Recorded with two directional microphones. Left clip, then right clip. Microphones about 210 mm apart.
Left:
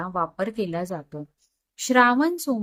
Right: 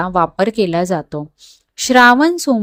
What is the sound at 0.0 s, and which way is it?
Speech, 40° right (ahead or behind).